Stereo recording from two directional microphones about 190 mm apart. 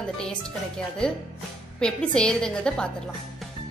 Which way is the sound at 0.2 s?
5° left (ahead or behind).